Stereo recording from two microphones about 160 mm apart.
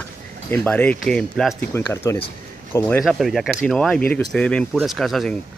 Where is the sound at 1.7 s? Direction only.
15° left (ahead or behind).